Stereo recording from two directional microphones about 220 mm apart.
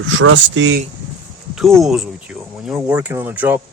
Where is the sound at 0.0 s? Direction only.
60° right (ahead or behind).